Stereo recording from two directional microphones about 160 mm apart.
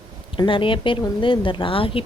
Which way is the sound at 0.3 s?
30° left (ahead or behind).